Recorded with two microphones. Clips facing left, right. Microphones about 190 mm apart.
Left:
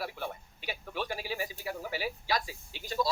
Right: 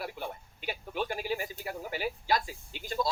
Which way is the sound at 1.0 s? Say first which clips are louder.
Right 2 dB; 50° right (ahead or behind).